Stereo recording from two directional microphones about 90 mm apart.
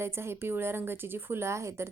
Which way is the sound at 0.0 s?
30° right (ahead or behind).